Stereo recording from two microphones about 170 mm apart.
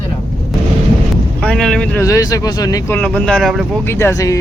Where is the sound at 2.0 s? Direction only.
20° left (ahead or behind).